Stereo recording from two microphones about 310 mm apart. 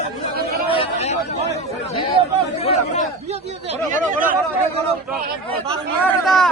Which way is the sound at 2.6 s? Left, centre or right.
Left.